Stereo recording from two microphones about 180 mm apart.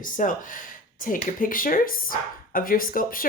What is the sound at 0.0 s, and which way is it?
Speech, 45° left (ahead or behind).